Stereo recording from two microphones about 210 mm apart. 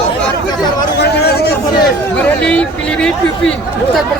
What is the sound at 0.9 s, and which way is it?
Speech, 50° left (ahead or behind).